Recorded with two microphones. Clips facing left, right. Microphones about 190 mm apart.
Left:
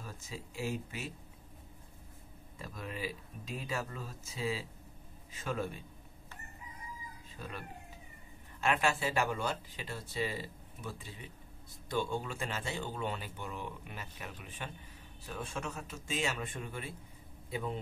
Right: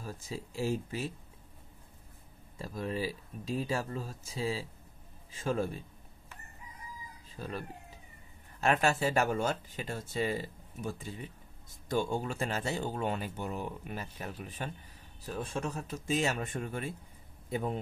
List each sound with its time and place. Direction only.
0.0 s speech: 35° right (ahead or behind)
2.6 s speech: 35° right (ahead or behind)
7.3 s speech: 35° right (ahead or behind)